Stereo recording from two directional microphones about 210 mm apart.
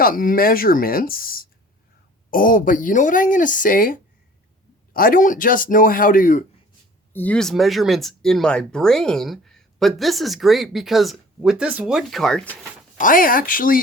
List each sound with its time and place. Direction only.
0.0 s speech: 40° left (ahead or behind)
7.1 s speech: 10° left (ahead or behind)
13.0 s speech: 40° left (ahead or behind)